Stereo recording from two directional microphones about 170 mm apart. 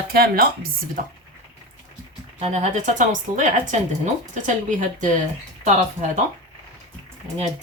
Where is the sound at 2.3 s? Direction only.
40° right (ahead or behind).